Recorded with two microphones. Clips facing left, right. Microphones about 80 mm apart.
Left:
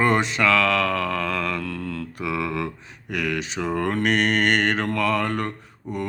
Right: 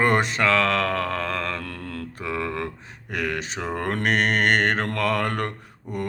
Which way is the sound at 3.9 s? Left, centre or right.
Right.